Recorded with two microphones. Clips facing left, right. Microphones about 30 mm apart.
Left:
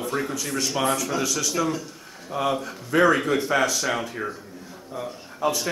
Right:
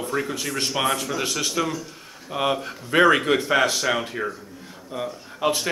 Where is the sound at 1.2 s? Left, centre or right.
Right.